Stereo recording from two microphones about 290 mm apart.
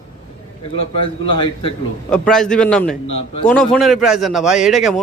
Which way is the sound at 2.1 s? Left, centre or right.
Centre.